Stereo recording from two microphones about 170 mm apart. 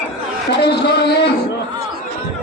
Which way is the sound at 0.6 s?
75° left (ahead or behind).